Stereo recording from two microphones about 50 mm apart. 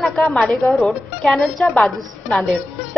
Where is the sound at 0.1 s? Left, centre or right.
Centre.